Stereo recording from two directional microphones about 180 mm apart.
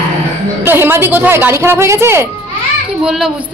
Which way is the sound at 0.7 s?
10° right (ahead or behind).